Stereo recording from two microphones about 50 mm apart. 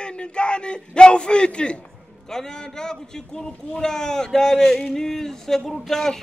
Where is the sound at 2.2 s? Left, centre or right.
Centre.